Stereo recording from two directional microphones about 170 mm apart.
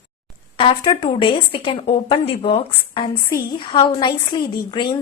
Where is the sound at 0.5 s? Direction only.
30° left (ahead or behind).